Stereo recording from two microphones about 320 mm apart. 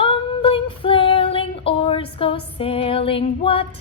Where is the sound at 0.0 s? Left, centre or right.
Centre.